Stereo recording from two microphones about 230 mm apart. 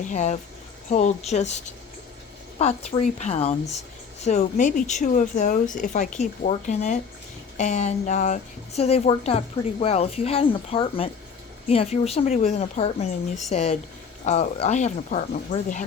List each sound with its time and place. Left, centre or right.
0.0 s a woman's voice: left
3.0 s a woman's voice: left